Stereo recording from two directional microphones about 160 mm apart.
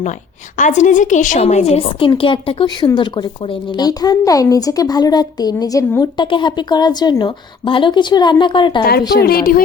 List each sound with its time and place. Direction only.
0.5 s a woman's voice: 50° left (ahead or behind); by 8.8 s 30° left (ahead or behind)
8.8 s speech: 75° left (ahead or behind)